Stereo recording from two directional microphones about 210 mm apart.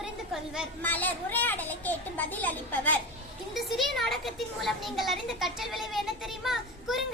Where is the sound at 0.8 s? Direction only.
10° left (ahead or behind).